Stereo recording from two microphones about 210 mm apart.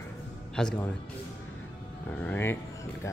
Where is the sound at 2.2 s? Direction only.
10° left (ahead or behind).